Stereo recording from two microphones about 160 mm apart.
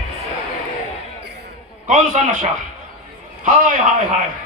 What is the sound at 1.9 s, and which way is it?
A man's voice, 50° right (ahead or behind).